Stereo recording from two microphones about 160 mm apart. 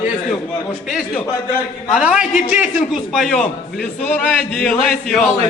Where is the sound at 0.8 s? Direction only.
Centre (ahead or behind).